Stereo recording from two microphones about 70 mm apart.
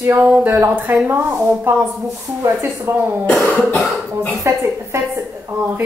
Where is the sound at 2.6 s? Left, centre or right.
Right.